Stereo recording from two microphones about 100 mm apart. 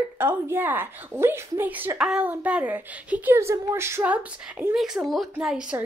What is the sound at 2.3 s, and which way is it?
A woman's voice, 15° right (ahead or behind).